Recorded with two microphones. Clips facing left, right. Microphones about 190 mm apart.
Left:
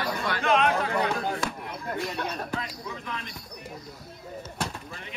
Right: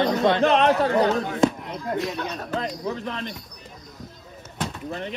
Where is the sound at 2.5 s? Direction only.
35° right (ahead or behind).